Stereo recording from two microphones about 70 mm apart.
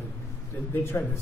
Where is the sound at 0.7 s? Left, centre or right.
Left.